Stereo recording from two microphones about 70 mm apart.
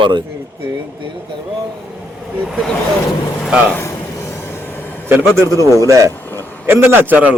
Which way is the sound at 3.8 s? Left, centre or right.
Left.